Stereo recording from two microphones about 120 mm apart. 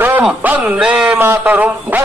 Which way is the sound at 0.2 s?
15° right (ahead or behind).